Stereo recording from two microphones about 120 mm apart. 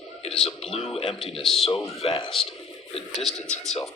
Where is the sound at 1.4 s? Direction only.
Centre (ahead or behind).